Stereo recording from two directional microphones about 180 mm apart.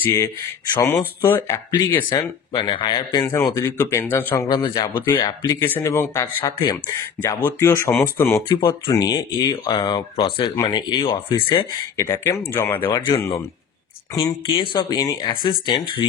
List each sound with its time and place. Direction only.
0.0 s speech: 15° left (ahead or behind)
2.0 s speech: 25° left (ahead or behind)
3.3 s speech: 15° left (ahead or behind)
4.5 s speech: 20° left (ahead or behind)
8.5 s speech: 25° left (ahead or behind)
12.0 s speech: 15° left (ahead or behind)
12.8 s speech: 25° left (ahead or behind)